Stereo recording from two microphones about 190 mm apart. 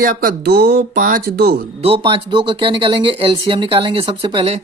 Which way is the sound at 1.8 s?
30° right (ahead or behind).